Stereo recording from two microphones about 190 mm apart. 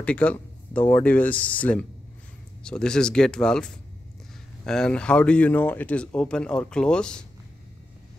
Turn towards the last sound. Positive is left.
turn(degrees=5)  # may be behind; listen again after turning